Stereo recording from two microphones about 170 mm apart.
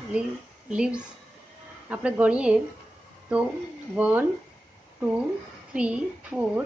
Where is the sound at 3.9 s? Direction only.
10° right (ahead or behind).